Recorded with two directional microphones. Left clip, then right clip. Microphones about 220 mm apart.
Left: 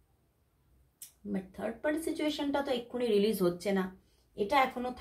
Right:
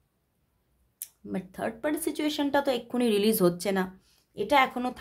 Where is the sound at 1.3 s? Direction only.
45° right (ahead or behind).